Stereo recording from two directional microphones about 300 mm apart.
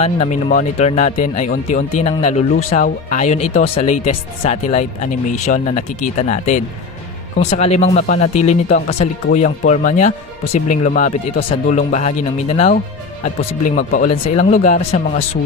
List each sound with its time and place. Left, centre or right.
0.0 s speech: left